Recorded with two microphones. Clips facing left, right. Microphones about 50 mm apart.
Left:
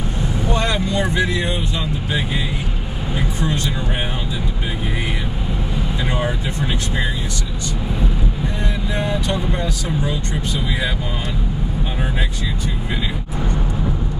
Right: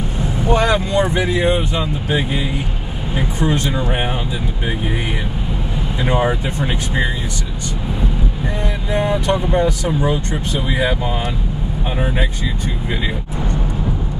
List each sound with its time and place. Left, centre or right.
0.9 s speech: right
3.2 s speech: right
6.0 s speech: right
8.9 s speech: right